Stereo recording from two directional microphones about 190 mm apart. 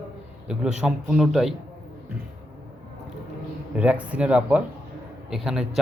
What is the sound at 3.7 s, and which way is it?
Speech, 5° right (ahead or behind).